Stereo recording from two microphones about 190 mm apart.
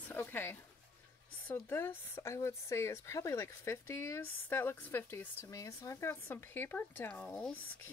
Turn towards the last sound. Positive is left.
turn(degrees=5)  # may be behind; listen again after turning